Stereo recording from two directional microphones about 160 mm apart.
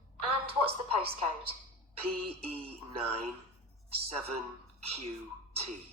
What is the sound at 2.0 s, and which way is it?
A woman's voice, 35° right (ahead or behind).